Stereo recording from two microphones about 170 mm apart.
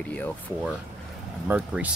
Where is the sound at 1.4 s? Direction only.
10° right (ahead or behind).